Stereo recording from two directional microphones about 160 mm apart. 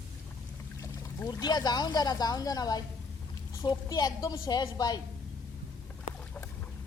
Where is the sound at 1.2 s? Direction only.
25° left (ahead or behind).